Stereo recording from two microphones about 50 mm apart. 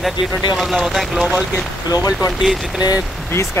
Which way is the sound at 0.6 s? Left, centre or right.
Centre.